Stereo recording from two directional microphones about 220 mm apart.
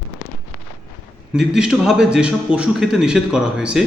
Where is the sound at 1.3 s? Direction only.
5° right (ahead or behind).